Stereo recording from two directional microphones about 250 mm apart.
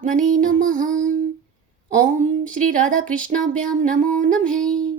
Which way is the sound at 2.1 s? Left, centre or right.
Right.